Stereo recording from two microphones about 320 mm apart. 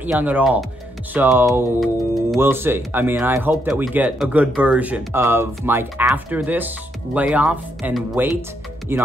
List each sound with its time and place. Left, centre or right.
0.0 s speech: centre